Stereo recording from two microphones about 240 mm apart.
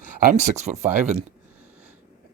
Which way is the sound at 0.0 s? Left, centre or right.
Right.